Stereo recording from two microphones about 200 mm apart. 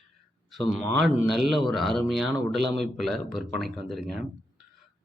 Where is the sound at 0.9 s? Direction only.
Centre (ahead or behind).